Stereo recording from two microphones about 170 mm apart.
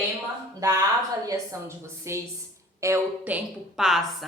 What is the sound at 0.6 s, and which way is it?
A woman's voice, 20° right (ahead or behind).